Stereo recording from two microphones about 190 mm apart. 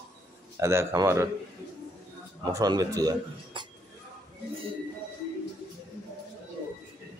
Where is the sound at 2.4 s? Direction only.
20° right (ahead or behind).